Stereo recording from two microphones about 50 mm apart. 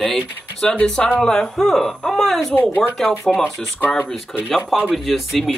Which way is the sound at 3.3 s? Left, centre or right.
Centre.